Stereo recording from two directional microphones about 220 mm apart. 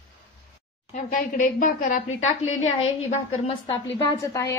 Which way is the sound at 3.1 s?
25° left (ahead or behind).